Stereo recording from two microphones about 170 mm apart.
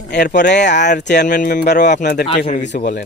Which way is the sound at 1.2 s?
50° left (ahead or behind).